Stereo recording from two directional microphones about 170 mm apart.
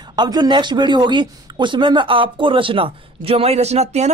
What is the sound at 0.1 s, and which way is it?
Speech, 25° right (ahead or behind).